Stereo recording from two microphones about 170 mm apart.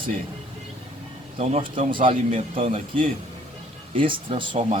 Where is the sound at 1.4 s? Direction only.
35° right (ahead or behind).